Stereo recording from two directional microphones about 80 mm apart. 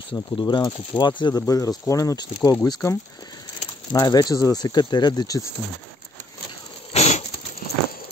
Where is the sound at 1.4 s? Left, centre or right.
Left.